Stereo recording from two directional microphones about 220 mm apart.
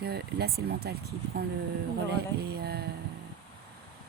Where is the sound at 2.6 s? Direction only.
45° right (ahead or behind).